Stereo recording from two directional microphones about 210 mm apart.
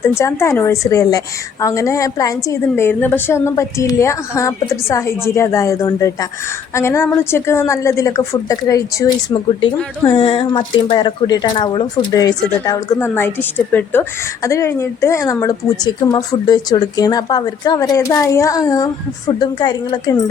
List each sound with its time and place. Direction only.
0.0 s a woman's voice: 15° left (ahead or behind)
14.4 s a woman's voice: 15° left (ahead or behind)